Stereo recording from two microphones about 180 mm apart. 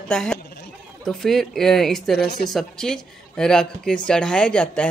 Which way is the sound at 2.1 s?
65° left (ahead or behind).